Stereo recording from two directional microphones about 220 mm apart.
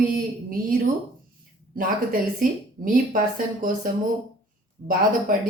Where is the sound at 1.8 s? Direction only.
40° right (ahead or behind).